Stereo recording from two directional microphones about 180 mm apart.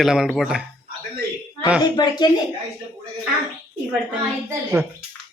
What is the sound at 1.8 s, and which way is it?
Speech, 25° left (ahead or behind).